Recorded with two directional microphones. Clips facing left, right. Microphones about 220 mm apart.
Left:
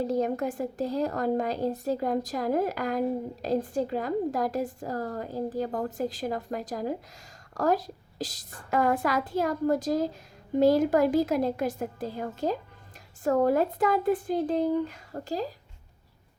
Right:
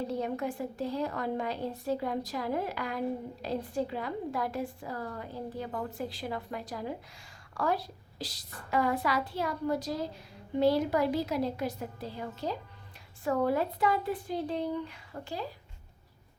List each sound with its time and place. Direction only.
0.1 s a woman's voice: 45° left (ahead or behind)